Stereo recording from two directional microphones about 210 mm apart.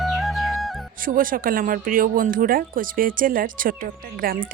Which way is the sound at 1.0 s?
40° right (ahead or behind).